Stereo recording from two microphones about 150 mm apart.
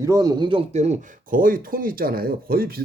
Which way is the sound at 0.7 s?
50° right (ahead or behind).